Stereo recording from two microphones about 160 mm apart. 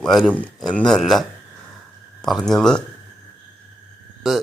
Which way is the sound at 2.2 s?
Centre (ahead or behind).